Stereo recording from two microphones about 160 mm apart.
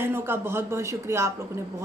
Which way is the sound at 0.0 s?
15° right (ahead or behind).